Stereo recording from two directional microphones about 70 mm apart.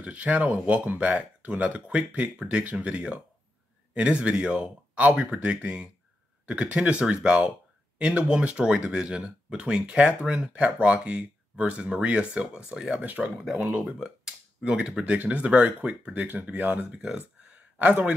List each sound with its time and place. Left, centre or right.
0.0 s speech: centre
13.0 s speech: right
13.4 s speech: centre